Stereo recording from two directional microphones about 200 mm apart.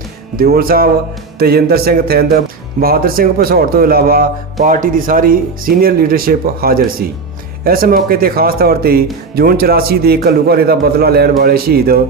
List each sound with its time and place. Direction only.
0.3 s speech: 45° right (ahead or behind)